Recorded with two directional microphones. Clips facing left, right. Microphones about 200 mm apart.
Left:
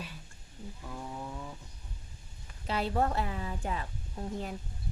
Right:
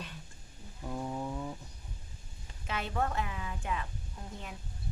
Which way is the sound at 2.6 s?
35° left (ahead or behind).